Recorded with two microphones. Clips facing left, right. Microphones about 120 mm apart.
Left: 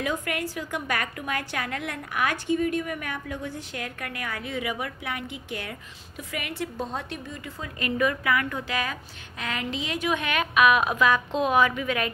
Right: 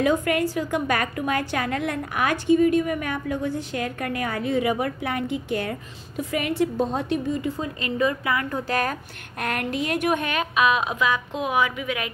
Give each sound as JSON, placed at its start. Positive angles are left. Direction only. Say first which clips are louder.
{"t": 0.0, "sound": "a woman's voice", "louder": "right 8 dB", "side_deg": -35}
{"t": 2.3, "sound": "a woman's voice", "louder": "right 11 dB", "side_deg": -20}
{"t": 9.4, "sound": "a woman's voice", "louder": "right 5 dB", "side_deg": -55}
{"t": 10.3, "sound": "a woman's voice", "louder": "left 1 dB", "side_deg": -30}